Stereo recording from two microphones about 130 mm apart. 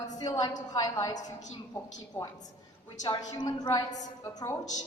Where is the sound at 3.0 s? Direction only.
35° left (ahead or behind).